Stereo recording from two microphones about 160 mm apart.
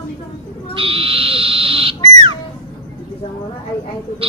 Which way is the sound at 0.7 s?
35° right (ahead or behind).